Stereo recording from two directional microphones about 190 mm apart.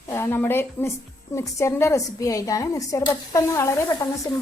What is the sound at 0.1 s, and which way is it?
A woman's voice, 15° left (ahead or behind).